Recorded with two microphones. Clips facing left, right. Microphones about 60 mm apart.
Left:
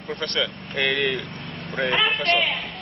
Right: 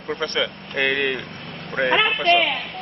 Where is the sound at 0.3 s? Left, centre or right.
Centre.